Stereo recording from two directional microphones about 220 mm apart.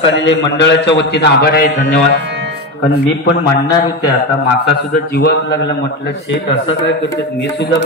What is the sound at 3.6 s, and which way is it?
Speech, 15° left (ahead or behind).